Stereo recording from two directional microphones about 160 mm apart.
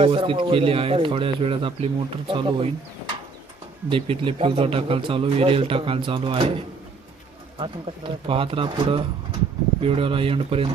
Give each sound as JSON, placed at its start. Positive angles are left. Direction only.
{"t": 0.0, "sound": "speech", "side_deg": -35}
{"t": 3.8, "sound": "speech", "side_deg": -35}